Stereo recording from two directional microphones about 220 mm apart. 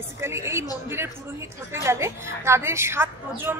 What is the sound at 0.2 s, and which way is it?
A woman's voice, 10° right (ahead or behind).